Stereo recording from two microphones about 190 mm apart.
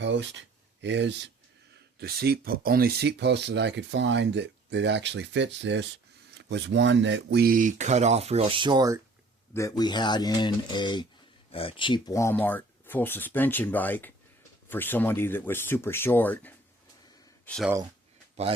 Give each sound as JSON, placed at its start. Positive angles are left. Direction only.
{"t": 0.0, "sound": "speech", "side_deg": -70}
{"t": 2.0, "sound": "speech", "side_deg": -55}
{"t": 9.5, "sound": "speech", "side_deg": 15}